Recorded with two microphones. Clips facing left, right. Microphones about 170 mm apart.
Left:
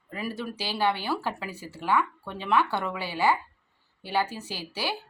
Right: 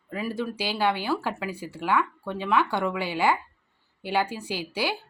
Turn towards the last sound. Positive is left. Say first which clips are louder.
# right 4 dB
turn(degrees=-15)  # may be behind; listen again after turning